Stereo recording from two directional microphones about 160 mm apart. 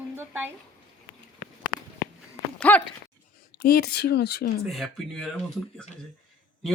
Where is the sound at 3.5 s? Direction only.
75° left (ahead or behind).